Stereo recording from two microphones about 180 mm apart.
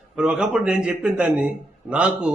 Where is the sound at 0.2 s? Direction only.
5° right (ahead or behind).